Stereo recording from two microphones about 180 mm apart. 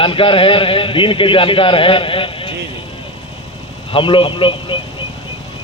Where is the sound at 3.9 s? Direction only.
30° left (ahead or behind).